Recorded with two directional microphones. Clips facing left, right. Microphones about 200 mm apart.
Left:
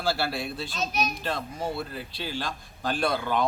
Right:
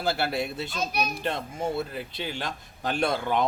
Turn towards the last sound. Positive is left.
turn(degrees=-20)  # may be behind; listen again after turning